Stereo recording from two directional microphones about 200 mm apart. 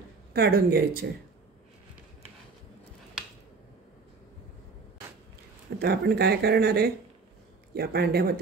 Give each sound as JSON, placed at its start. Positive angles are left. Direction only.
{"t": 0.3, "sound": "speech", "side_deg": -50}
{"t": 5.8, "sound": "speech", "side_deg": -50}